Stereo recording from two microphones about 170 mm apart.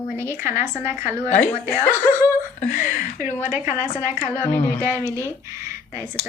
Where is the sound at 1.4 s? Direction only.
10° left (ahead or behind).